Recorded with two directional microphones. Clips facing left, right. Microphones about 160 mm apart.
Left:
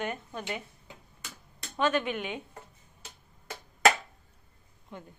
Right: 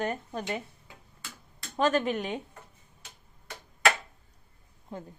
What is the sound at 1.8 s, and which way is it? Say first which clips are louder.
Speech: right 2 dB; 40° right (ahead or behind).